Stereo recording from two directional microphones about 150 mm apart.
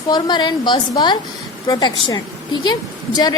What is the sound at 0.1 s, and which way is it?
A woman's voice, 30° left (ahead or behind).